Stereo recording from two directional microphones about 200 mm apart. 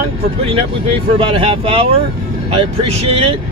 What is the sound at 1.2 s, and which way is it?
Speech, 25° right (ahead or behind).